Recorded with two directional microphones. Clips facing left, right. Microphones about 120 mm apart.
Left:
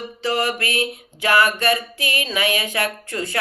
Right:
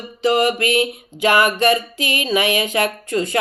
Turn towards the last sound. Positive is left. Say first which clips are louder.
# right 6 dB
turn(degrees=-20)  # may be behind; listen again after turning